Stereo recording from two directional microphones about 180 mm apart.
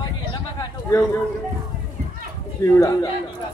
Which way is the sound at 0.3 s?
25° left (ahead or behind).